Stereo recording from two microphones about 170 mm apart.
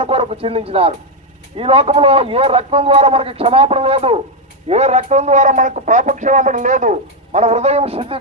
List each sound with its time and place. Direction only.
0.0 s a man's voice: 35° right (ahead or behind)